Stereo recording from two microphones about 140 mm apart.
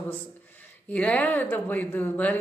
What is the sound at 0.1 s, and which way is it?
Speech, 10° left (ahead or behind).